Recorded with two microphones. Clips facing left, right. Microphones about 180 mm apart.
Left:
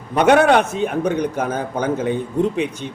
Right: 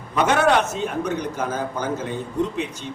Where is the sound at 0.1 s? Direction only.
60° left (ahead or behind).